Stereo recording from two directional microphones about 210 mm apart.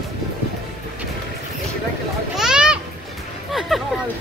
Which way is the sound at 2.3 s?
5° right (ahead or behind).